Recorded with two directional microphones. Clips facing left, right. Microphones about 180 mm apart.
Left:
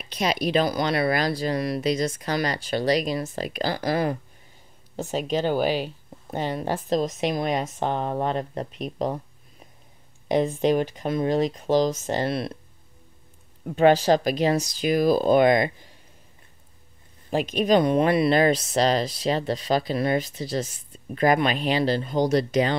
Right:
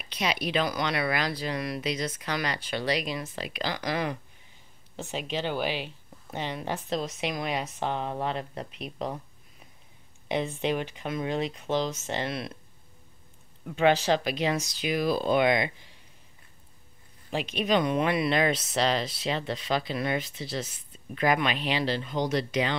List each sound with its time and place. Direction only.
0.0 s speech: 40° left (ahead or behind)
10.2 s speech: 40° left (ahead or behind)
13.7 s speech: 40° left (ahead or behind)
17.3 s speech: 45° left (ahead or behind)